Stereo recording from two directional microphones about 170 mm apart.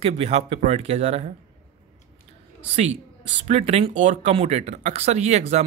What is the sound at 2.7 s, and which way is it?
Speech, 40° right (ahead or behind).